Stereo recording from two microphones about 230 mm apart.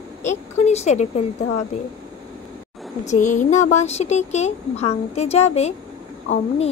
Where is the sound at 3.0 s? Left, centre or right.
Left.